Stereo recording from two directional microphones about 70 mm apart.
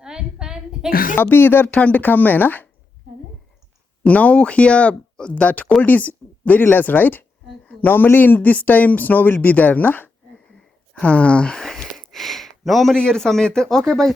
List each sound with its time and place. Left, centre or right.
0.0 s a sound: centre
1.1 s speech: left
4.0 s speech: left
10.9 s sniff: centre
13.0 s speech: centre